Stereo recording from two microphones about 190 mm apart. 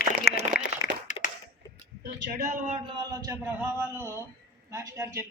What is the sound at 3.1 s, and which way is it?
Speech, 15° right (ahead or behind).